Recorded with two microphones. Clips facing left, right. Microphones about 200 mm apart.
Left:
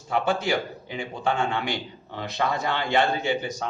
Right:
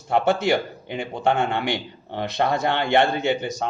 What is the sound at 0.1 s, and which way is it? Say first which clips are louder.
A man's voice: right 4 dB; 65° right (ahead or behind).